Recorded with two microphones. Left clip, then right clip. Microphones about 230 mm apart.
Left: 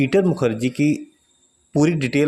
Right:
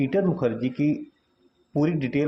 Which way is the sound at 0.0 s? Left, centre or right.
Left.